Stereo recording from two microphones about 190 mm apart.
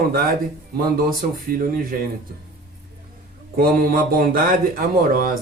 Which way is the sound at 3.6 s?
50° right (ahead or behind).